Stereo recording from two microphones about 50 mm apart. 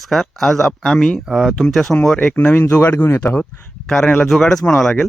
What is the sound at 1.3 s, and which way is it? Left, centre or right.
Speech, centre.